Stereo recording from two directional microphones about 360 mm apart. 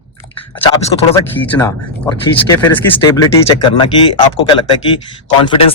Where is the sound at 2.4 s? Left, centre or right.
Centre.